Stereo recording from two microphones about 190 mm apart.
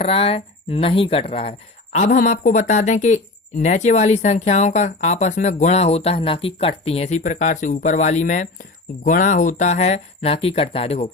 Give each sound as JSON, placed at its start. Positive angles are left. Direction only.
{"t": 0.0, "sound": "speech", "side_deg": 30}